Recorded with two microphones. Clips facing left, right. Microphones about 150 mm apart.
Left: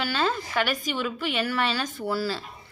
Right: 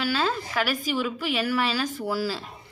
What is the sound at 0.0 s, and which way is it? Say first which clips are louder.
A woman's voice: right 1 dB; centre (ahead or behind).